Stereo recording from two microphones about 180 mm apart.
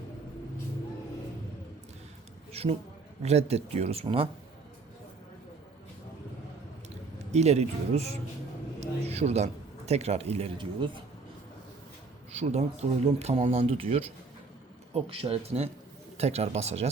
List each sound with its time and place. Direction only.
2.5 s a man's voice: 35° right (ahead or behind)
7.3 s a man's voice: 35° right (ahead or behind)
12.4 s a man's voice: 40° right (ahead or behind)